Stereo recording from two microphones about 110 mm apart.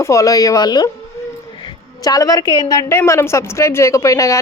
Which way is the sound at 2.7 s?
30° left (ahead or behind).